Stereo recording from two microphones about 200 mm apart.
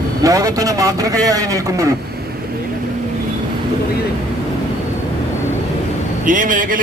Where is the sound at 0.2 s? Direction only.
15° right (ahead or behind).